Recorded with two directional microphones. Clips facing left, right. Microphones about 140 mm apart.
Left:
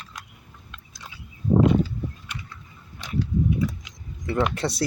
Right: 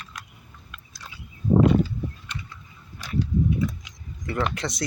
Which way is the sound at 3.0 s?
25° left (ahead or behind).